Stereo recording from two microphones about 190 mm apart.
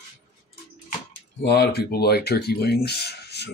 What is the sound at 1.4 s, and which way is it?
Speech, 55° left (ahead or behind).